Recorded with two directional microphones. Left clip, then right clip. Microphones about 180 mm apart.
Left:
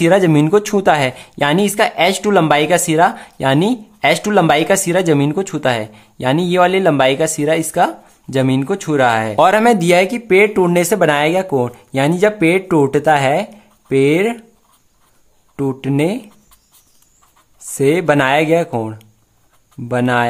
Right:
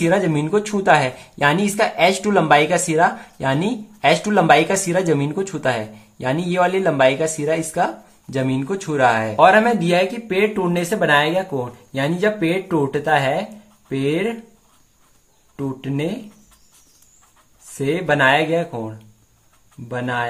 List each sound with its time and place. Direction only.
0.0 s speech: 40° left (ahead or behind)
9.4 s speech: 50° left (ahead or behind)
15.5 s speech: 50° left (ahead or behind)
17.7 s speech: 55° left (ahead or behind)